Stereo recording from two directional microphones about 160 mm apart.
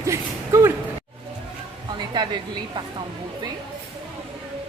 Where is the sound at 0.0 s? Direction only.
20° right (ahead or behind).